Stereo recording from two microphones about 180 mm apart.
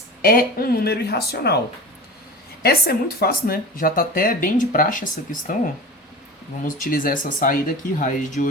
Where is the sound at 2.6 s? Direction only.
60° left (ahead or behind).